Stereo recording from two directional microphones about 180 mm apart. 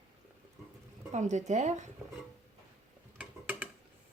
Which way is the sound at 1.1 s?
40° right (ahead or behind).